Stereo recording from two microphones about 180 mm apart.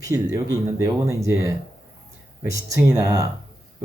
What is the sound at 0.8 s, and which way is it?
Speech, 15° right (ahead or behind).